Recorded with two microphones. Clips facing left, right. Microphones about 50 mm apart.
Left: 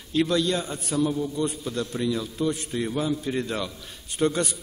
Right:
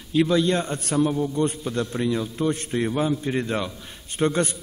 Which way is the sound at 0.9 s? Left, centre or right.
Right.